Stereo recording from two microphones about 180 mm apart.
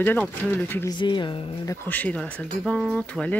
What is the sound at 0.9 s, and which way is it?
Speech, 25° left (ahead or behind).